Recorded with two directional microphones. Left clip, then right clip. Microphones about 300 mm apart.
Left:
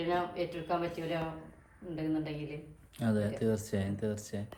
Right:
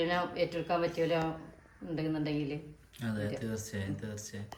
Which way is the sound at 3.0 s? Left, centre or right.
Centre.